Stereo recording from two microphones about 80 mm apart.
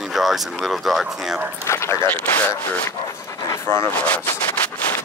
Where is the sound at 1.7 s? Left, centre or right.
Left.